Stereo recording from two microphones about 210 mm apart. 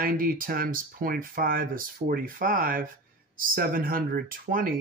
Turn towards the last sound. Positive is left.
turn(degrees=-40)  # may be behind; listen again after turning